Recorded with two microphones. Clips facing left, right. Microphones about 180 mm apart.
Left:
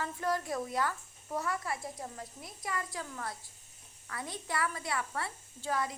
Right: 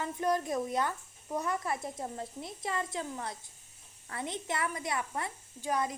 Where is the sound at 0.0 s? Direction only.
20° right (ahead or behind).